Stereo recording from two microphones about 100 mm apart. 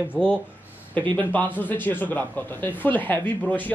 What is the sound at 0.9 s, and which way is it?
Speech, 15° left (ahead or behind).